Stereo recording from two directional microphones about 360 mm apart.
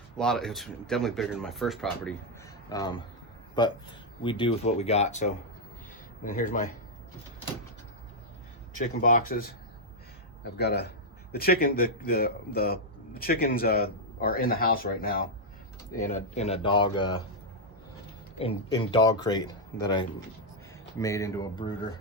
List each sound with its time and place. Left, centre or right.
0.2 s speech: centre
2.6 s a man's voice: centre
8.8 s a man's voice: left
18.3 s speech: centre